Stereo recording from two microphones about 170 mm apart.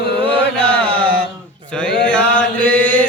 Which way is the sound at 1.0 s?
60° right (ahead or behind).